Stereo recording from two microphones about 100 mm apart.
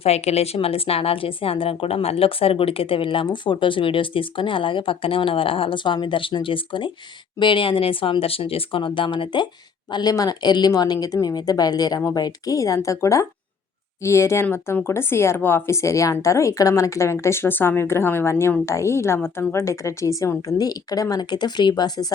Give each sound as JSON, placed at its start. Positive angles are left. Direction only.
{"t": 0.0, "sound": "a woman's voice", "side_deg": 90}
{"t": 9.9, "sound": "a woman's voice", "side_deg": 40}